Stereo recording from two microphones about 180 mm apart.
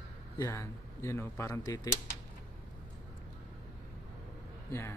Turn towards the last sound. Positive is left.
turn(degrees=15)  # may be behind; listen again after turning